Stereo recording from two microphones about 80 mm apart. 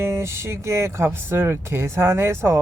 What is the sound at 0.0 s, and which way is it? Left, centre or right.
Speech, right.